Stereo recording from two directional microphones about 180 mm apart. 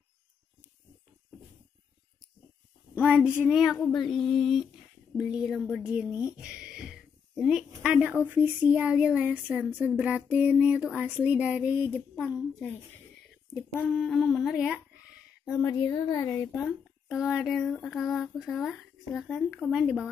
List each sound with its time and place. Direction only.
3.0 s speech: 5° right (ahead or behind)
15.4 s speech: 20° left (ahead or behind)
17.1 s speech: centre (ahead or behind)